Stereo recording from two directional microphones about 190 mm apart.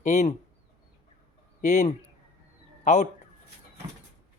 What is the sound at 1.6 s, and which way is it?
Speech, 40° left (ahead or behind).